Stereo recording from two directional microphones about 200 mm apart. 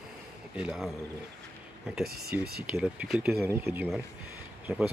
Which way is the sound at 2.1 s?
50° right (ahead or behind).